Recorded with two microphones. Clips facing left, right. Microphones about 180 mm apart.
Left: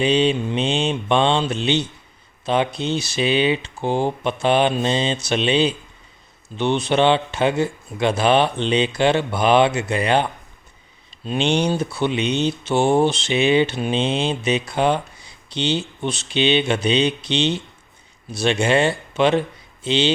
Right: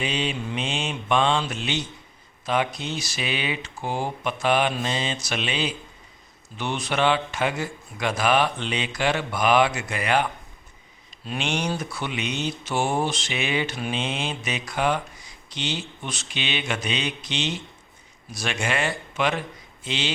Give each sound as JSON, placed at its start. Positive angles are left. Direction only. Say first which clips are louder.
{"t": 0.0, "sound": "speech", "louder": "left 10 dB", "side_deg": 30}
{"t": 11.3, "sound": "speech", "louder": "left 8 dB", "side_deg": 30}